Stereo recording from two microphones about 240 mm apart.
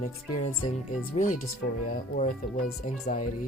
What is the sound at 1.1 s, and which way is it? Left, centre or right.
Speech, left.